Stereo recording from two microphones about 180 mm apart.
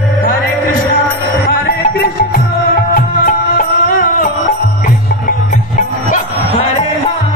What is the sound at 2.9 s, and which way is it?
Music, 50° left (ahead or behind).